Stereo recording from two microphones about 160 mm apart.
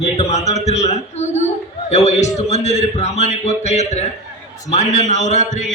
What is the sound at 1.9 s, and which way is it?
A man's voice, 45° left (ahead or behind).